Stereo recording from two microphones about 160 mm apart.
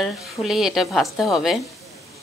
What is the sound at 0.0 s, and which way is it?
Speech, centre (ahead or behind).